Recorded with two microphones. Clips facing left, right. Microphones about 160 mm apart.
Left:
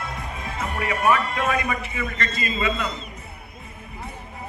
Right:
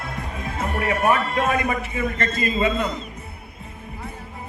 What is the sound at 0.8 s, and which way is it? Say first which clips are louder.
A man's voice: right 1 dB; 50° right (ahead or behind).